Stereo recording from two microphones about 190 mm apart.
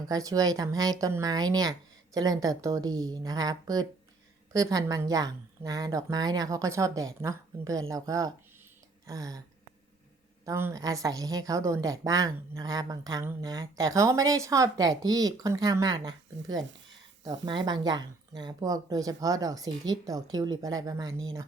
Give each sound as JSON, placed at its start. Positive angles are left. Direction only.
{"t": 0.1, "sound": "a woman's voice", "side_deg": -20}
{"t": 10.4, "sound": "a woman's voice", "side_deg": -15}